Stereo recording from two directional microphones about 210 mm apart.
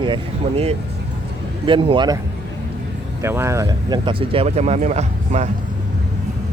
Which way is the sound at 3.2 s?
10° right (ahead or behind).